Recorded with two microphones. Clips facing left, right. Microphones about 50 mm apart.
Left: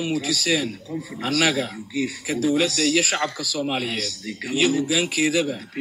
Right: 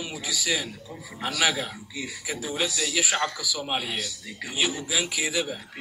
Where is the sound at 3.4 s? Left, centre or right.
Left.